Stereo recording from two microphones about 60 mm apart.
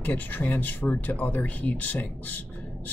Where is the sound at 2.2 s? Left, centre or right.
Left.